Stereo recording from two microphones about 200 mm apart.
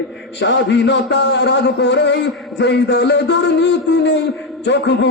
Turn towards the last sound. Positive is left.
turn(degrees=65)  # may be behind; listen again after turning